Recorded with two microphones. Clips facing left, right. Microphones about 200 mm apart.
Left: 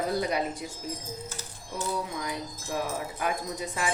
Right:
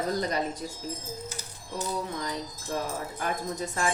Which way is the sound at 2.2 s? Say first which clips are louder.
Even; 10° left (ahead or behind).